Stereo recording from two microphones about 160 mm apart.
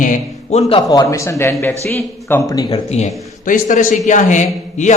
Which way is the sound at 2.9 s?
50° left (ahead or behind).